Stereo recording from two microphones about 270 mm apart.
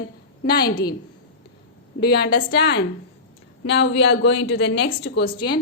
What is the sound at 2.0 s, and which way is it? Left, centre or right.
A woman's voice, left.